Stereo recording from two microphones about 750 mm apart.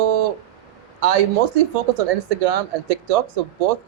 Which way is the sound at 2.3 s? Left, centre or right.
Right.